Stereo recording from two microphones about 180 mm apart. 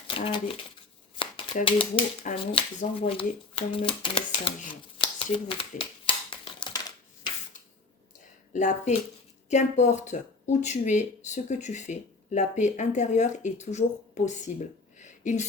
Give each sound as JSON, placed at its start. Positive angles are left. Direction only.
{"t": 0.3, "sound": "speech", "side_deg": 30}
{"t": 1.6, "sound": "speech", "side_deg": 30}
{"t": 8.5, "sound": "a woman's voice", "side_deg": 40}
{"t": 14.9, "sound": "a sound", "side_deg": 40}